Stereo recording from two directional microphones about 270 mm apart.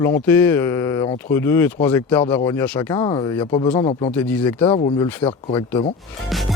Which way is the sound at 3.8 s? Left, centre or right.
Left.